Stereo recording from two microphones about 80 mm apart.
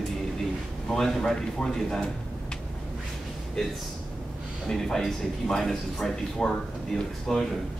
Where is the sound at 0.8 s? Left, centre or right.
Centre.